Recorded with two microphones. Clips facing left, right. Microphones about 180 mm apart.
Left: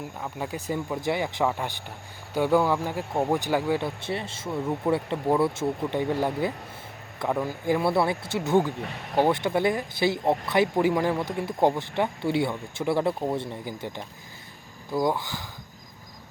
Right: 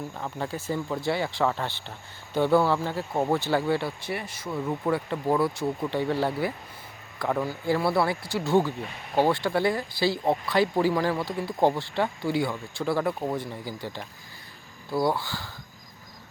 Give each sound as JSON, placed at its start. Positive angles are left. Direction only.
{"t": 0.2, "sound": "speech", "side_deg": 10}